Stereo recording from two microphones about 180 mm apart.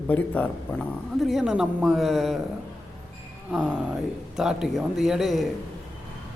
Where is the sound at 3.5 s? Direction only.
Centre (ahead or behind).